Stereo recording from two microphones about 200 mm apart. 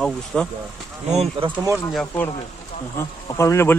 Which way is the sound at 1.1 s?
30° right (ahead or behind).